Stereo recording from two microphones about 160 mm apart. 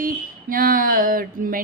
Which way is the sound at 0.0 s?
60° right (ahead or behind).